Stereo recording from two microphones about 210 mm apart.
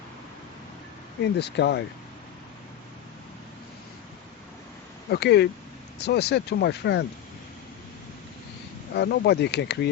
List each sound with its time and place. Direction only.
1.2 s speech: 55° left (ahead or behind)
5.1 s speech: 50° left (ahead or behind)
9.0 s speech: 50° left (ahead or behind)